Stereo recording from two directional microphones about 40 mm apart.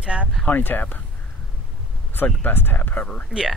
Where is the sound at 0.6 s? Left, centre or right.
Left.